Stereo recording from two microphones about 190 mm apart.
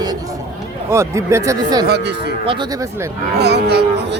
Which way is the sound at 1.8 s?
60° right (ahead or behind).